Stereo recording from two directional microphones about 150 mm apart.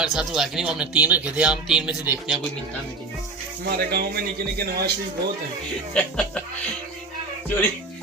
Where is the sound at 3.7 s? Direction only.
90° right.